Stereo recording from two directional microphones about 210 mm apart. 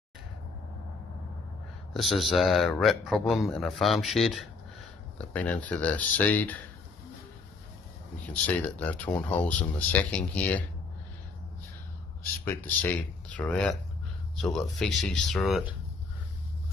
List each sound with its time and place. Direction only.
2.0 s a man's voice: centre (ahead or behind)
8.3 s speech: 5° left (ahead or behind)
12.4 s a man's voice: 10° left (ahead or behind)